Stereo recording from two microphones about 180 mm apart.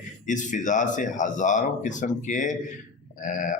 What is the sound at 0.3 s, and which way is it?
A man's voice, 45° left (ahead or behind).